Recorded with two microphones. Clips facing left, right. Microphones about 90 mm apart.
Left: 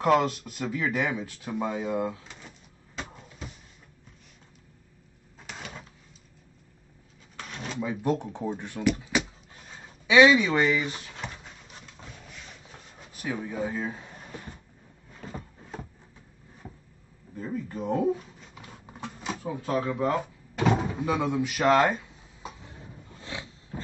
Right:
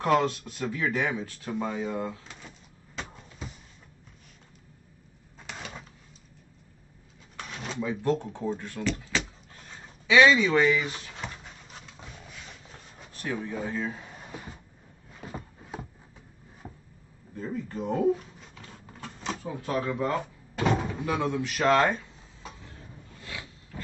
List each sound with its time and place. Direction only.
0.0 s speech: 15° left (ahead or behind)
2.0 s speech: 15° left (ahead or behind)
3.0 s vehicle: 5° left (ahead or behind)
5.4 s a sound: centre (ahead or behind)
7.3 s a sound: centre (ahead or behind)
7.8 s speech: 15° left (ahead or behind)
10.0 s dog: 15° left (ahead or behind)
13.1 s speech: 10° left (ahead or behind)
14.0 s a sound: 5° right (ahead or behind)
17.4 s speech: 5° left (ahead or behind)
18.5 s a sound: 15° left (ahead or behind)
19.1 s cupboard open or close: 5° left (ahead or behind); by 23.8 s 25° left (ahead or behind)